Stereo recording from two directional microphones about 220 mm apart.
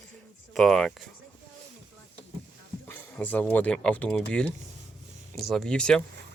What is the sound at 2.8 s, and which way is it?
Speech, 5° left (ahead or behind).